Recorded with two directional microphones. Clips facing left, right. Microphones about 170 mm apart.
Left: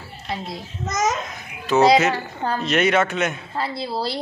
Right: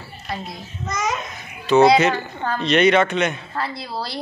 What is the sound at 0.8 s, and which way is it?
Speech, 40° left (ahead or behind).